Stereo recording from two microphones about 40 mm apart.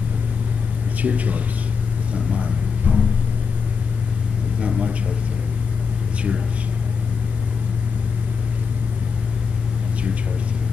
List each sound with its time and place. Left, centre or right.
1.0 s speech: right
4.6 s a man's voice: right